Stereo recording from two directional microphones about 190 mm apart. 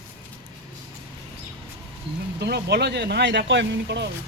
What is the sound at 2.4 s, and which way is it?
Speech, 60° right (ahead or behind).